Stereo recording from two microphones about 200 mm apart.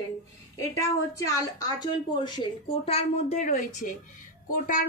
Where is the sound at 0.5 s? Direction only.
15° left (ahead or behind).